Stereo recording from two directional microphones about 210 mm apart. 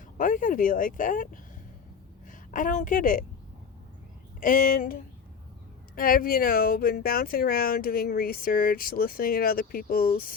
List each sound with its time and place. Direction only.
0.2 s a woman's voice: 40° left (ahead or behind)
4.4 s speech: 40° left (ahead or behind)
6.0 s speech: 45° left (ahead or behind)